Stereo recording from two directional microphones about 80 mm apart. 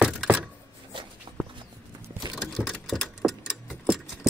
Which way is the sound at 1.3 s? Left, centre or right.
Right.